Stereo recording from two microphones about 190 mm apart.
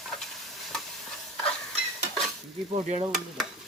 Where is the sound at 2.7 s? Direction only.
35° right (ahead or behind).